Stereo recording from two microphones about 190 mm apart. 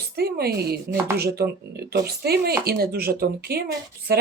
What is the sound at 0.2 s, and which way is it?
A woman's voice, 55° right (ahead or behind).